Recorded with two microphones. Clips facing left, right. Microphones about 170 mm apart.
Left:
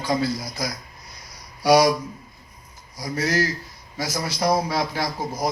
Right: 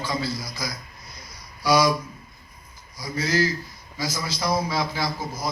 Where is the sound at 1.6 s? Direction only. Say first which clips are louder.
Left 4 dB; 70° left (ahead or behind).